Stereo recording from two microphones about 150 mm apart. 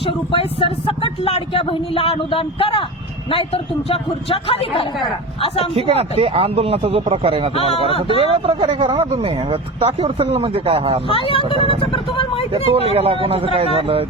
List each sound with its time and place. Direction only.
0.0 s speech: 35° left (ahead or behind)
5.7 s speech: 40° right (ahead or behind)
11.1 s speech: 35° left (ahead or behind)
12.7 s speech: 40° right (ahead or behind)